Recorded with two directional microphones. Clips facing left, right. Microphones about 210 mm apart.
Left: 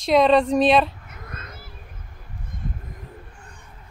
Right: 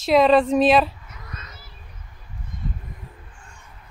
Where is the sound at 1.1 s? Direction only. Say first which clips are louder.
Left 2 dB; 55° left (ahead or behind).